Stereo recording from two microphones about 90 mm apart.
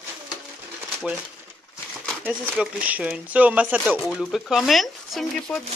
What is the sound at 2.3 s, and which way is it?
Speech, 15° right (ahead or behind).